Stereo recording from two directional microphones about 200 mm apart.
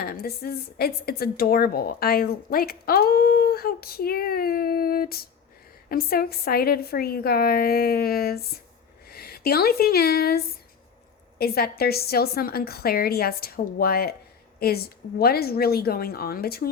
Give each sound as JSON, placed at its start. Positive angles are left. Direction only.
{"t": 0.0, "sound": "a woman's voice", "side_deg": 50}